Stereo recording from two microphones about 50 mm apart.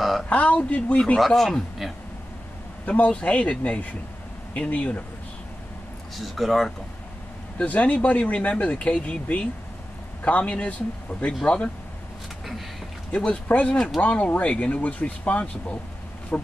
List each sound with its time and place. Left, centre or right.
0.0 s a sound: centre
0.3 s speech: left
1.2 s speech: centre
2.9 s speech: left
6.1 s speech: centre
7.5 s speech: left
13.1 s speech: left